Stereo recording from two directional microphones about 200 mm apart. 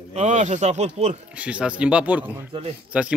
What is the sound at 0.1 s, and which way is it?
Speech, 35° right (ahead or behind).